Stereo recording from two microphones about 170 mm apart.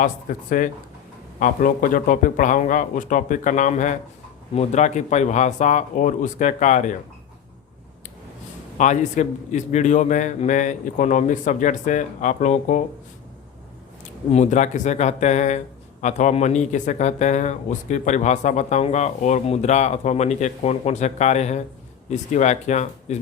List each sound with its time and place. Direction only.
0.0 s speech: 50° left (ahead or behind)
8.8 s speech: 45° left (ahead or behind)
14.3 s speech: 45° left (ahead or behind)